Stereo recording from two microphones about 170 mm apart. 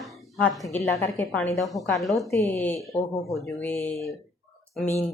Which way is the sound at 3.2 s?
Centre (ahead or behind).